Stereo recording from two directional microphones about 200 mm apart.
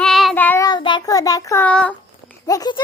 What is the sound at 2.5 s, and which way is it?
Speech, 20° left (ahead or behind).